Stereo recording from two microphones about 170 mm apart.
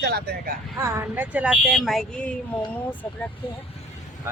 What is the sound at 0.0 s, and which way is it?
Speech, 70° right (ahead or behind).